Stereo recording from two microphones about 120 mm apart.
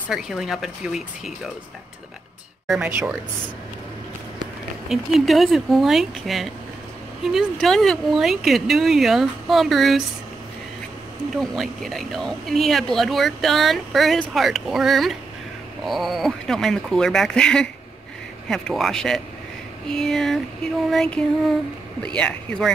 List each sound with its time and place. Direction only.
0.1 s speech: 5° right (ahead or behind)
2.7 s speech: 10° right (ahead or behind)
4.8 s speech: centre (ahead or behind)
11.3 s speech: centre (ahead or behind)